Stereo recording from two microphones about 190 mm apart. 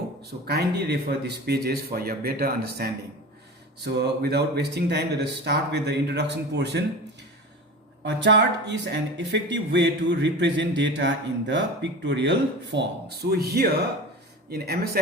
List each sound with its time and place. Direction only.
0.4 s speech: 55° right (ahead or behind)
8.0 s speech: 65° right (ahead or behind)